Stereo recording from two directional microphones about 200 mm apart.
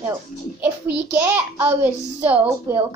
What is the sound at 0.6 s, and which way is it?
A child's voice, 10° right (ahead or behind).